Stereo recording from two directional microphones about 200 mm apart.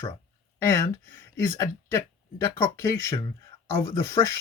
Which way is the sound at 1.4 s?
15° left (ahead or behind).